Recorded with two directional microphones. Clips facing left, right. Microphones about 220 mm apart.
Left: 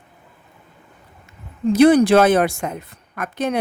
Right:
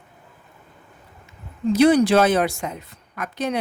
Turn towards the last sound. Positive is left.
turn(degrees=55)  # may be behind; listen again after turning